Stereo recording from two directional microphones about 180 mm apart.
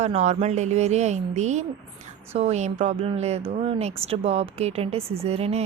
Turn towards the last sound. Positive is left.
turn(degrees=-35)  # may be behind; listen again after turning